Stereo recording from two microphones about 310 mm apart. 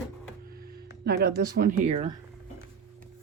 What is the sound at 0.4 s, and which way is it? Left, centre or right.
Speech, right.